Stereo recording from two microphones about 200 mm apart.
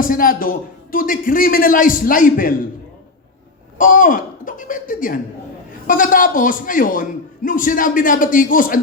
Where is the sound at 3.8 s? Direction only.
40° left (ahead or behind).